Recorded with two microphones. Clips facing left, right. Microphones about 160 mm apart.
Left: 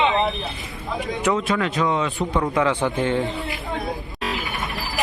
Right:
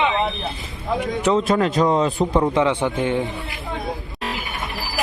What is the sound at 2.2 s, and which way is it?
Speech, 20° right (ahead or behind).